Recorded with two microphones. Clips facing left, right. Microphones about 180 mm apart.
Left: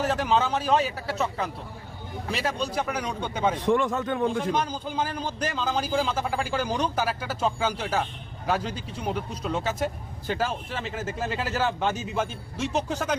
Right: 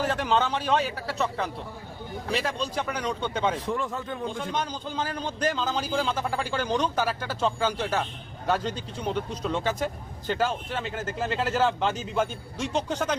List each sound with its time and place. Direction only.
0.0 s a man's voice: 5° left (ahead or behind)
3.7 s speech: 85° left
4.5 s speech: 10° left (ahead or behind)